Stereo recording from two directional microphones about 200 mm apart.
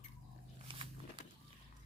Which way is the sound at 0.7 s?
25° right (ahead or behind).